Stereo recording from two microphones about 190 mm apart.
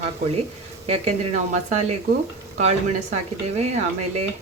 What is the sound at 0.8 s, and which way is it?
Speech, 35° right (ahead or behind).